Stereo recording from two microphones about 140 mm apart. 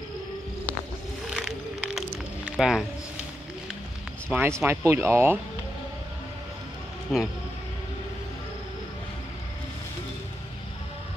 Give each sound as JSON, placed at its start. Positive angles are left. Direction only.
{"t": 1.3, "sound": "music", "side_deg": -5}
{"t": 4.3, "sound": "speech", "side_deg": -15}
{"t": 7.1, "sound": "speech", "side_deg": 0}